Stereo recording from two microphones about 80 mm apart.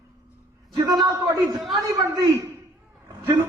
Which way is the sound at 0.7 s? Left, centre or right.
Right.